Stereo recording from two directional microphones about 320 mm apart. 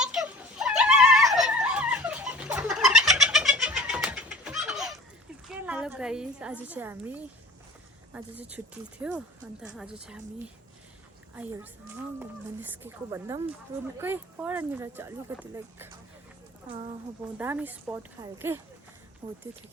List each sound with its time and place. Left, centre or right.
0.0 s dog: centre
5.5 s a woman's voice: centre
11.3 s speech: centre
17.3 s speech: centre